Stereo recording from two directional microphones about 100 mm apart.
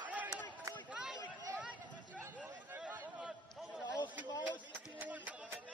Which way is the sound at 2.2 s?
20° right (ahead or behind).